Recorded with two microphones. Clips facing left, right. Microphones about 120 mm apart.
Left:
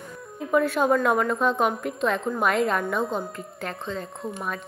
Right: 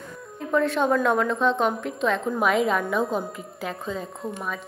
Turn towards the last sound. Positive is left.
turn(degrees=0)  # may be behind; listen again after turning